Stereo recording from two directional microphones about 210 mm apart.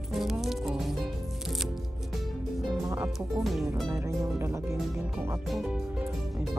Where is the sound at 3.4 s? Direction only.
Centre (ahead or behind).